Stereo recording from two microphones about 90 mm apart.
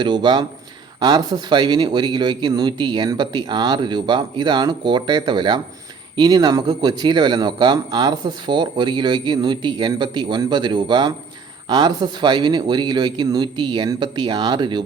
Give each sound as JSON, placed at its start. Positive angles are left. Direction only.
{"t": 0.0, "sound": "a man's voice", "side_deg": -55}